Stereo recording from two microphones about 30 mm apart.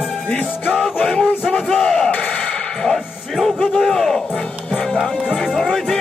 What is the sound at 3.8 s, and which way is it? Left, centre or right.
Speech, centre.